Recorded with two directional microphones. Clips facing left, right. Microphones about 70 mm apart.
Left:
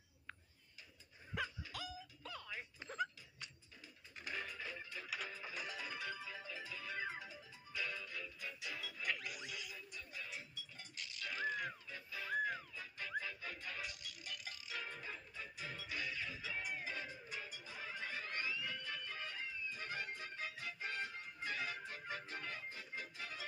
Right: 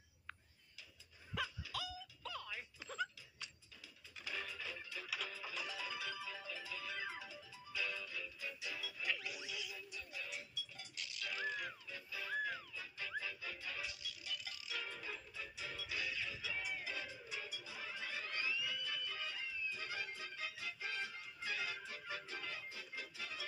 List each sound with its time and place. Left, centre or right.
1.3 s a sound: left
4.2 s music: left
17.3 s fire alarm: left